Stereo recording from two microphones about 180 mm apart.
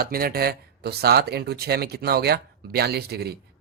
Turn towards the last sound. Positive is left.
turn(degrees=-60)  # may be behind; listen again after turning